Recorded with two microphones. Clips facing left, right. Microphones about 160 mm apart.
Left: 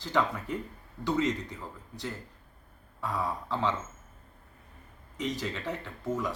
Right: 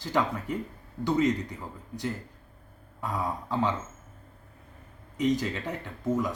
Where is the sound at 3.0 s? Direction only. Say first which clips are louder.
Right 1 dB; 15° right (ahead or behind).